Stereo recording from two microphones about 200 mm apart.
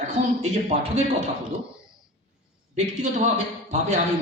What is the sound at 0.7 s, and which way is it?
Speech, 35° right (ahead or behind).